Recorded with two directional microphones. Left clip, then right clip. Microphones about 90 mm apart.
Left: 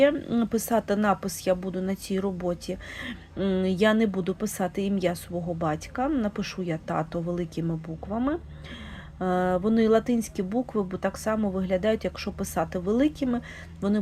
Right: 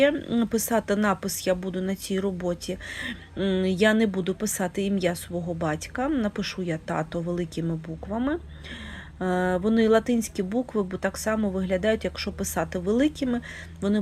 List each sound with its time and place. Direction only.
0.0 s a woman's voice: 20° right (ahead or behind)